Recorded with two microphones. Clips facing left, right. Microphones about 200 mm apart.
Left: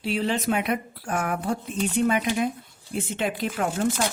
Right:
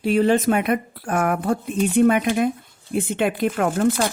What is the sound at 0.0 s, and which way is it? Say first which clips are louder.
Speech: right 8 dB; 50° right (ahead or behind).